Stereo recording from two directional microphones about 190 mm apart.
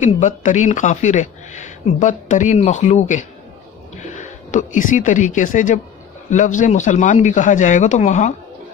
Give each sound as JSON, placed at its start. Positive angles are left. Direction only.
{"t": 0.0, "sound": "speech", "side_deg": 40}